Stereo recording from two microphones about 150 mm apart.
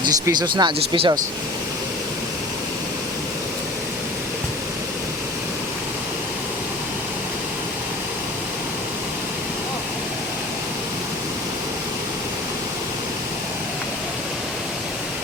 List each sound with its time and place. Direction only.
0.0 s speech: 25° right (ahead or behind)